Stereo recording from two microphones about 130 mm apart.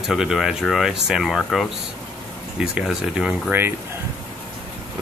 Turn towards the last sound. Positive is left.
turn(degrees=-10)  # may be behind; listen again after turning